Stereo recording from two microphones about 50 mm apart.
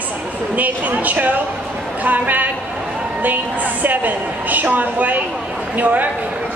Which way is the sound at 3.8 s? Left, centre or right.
Right.